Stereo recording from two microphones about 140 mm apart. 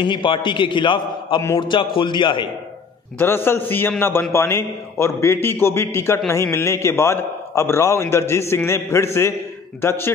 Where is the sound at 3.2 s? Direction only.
15° left (ahead or behind).